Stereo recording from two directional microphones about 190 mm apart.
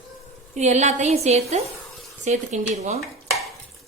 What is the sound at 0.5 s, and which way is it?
A woman's voice, 40° right (ahead or behind).